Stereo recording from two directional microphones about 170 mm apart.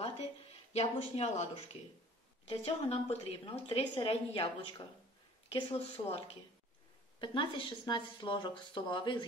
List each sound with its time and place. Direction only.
0.7 s a woman's voice: 40° left (ahead or behind)